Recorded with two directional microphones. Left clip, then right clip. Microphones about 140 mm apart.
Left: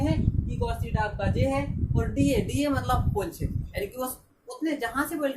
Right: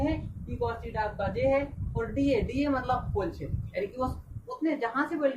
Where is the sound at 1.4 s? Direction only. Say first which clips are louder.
Right 2 dB; 20° left (ahead or behind).